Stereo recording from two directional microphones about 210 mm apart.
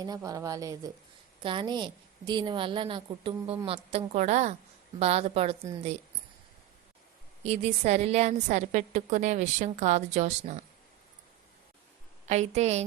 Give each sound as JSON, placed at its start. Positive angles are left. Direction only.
{"t": 0.0, "sound": "a woman's voice", "side_deg": -15}
{"t": 7.4, "sound": "a woman's voice", "side_deg": -30}
{"t": 12.3, "sound": "a woman's voice", "side_deg": -30}